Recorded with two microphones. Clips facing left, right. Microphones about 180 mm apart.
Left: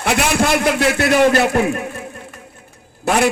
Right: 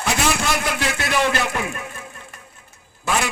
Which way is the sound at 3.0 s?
60° left (ahead or behind).